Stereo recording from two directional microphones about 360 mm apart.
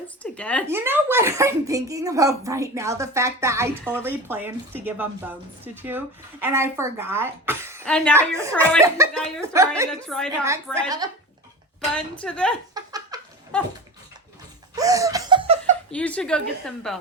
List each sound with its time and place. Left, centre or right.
0.2 s speech: centre
11.9 s speech: centre
12.7 s giggle: centre
14.8 s laughter: centre
15.9 s speech: centre